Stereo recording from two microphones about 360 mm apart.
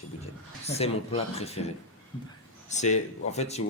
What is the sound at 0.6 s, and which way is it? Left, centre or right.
Speech, centre.